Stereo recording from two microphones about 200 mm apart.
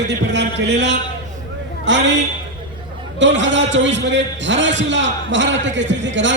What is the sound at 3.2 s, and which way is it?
A man's voice, 65° right (ahead or behind).